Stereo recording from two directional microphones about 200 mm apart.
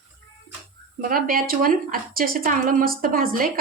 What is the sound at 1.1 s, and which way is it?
A woman's voice, 45° right (ahead or behind).